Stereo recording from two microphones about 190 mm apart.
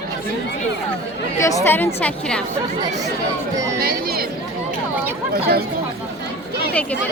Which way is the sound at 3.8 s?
55° right (ahead or behind).